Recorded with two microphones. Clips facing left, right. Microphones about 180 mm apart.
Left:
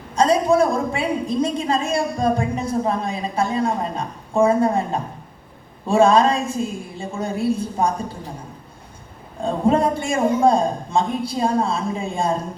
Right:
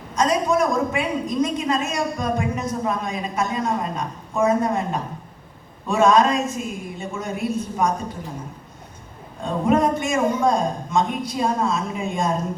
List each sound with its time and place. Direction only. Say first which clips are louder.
0.2 s a woman's voice: left 3 dB; 30° left (ahead or behind)
9.4 s a woman's voice: left 1 dB; 30° left (ahead or behind)